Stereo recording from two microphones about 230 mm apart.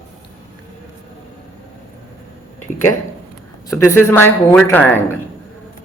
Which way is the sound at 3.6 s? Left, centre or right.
Centre.